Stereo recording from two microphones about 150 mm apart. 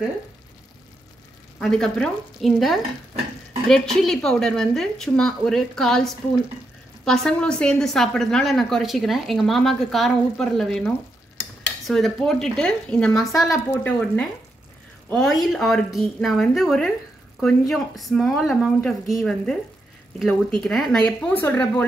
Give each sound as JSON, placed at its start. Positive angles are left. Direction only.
{"t": 1.6, "sound": "a woman's voice", "side_deg": 5}
{"t": 11.9, "sound": "a woman's voice", "side_deg": 5}